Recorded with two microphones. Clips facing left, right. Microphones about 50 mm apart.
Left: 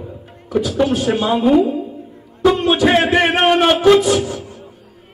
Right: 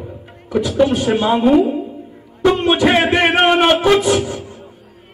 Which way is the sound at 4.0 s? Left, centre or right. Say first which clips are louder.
Even; centre.